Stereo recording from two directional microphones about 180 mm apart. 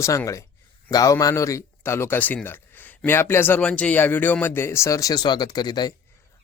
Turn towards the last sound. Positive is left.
turn(degrees=25)  # may be behind; listen again after turning